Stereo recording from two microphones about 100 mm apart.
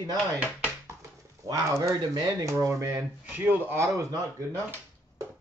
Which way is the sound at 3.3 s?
20° right (ahead or behind).